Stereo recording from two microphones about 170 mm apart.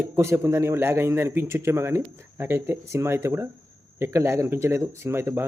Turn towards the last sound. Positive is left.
turn(degrees=-15)  # may be behind; listen again after turning